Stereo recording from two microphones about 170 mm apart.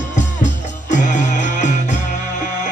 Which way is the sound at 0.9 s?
45° left (ahead or behind).